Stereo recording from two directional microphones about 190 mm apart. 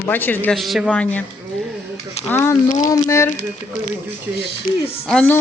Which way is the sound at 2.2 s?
35° left (ahead or behind).